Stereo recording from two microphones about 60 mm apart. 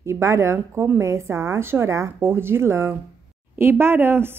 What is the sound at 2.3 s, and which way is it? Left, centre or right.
A woman's voice, right.